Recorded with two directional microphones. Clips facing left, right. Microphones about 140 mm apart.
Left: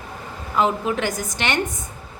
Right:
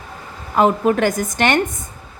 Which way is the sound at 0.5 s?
50° right (ahead or behind).